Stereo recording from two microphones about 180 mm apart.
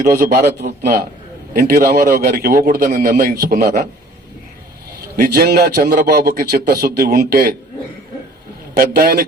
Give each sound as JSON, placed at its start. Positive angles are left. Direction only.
{"t": 0.3, "sound": "a man's voice", "side_deg": -65}
{"t": 5.1, "sound": "a man's voice", "side_deg": -55}
{"t": 8.7, "sound": "a man's voice", "side_deg": -60}